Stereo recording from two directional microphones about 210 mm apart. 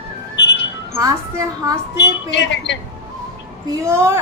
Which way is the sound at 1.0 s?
15° right (ahead or behind).